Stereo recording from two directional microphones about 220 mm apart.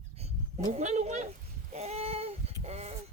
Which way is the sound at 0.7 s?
30° right (ahead or behind).